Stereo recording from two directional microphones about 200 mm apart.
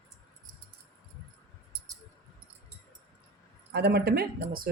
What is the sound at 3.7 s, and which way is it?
Speech, 55° right (ahead or behind).